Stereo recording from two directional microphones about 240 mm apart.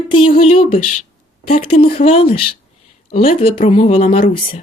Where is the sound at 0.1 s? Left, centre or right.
Left.